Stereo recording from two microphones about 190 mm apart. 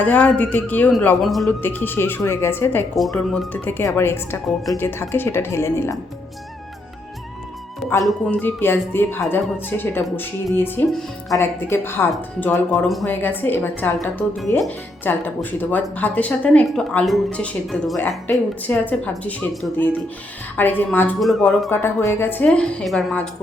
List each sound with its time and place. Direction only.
0.0 s speech: 10° left (ahead or behind)
2.9 s speech: centre (ahead or behind)
4.4 s speech: centre (ahead or behind)
4.8 s speech: 10° left (ahead or behind)
8.0 s speech: 10° left (ahead or behind)
21.7 s speech: 15° left (ahead or behind)